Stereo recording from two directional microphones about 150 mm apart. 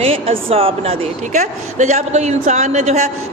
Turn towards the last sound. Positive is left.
turn(degrees=-50)  # may be behind; listen again after turning